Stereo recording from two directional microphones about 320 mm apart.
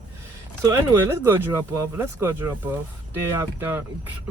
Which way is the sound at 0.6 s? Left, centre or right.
Centre.